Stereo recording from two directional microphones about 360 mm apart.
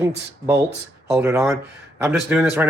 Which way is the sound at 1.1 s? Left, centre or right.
Centre.